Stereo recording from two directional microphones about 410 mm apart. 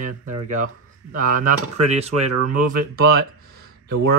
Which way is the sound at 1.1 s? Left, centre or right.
Centre.